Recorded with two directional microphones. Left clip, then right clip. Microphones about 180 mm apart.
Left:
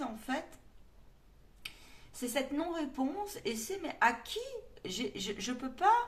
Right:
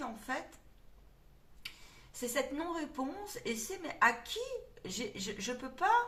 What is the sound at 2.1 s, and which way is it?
Speech, 30° left (ahead or behind).